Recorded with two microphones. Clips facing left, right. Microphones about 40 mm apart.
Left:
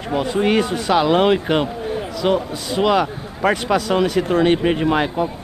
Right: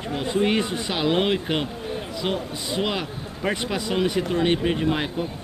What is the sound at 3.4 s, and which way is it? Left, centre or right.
Speech, left.